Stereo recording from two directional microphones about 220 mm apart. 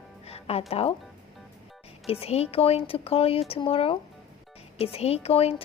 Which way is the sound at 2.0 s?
25° left (ahead or behind).